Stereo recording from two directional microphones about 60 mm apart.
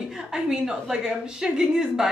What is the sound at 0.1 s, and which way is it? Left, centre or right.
A woman's voice, centre.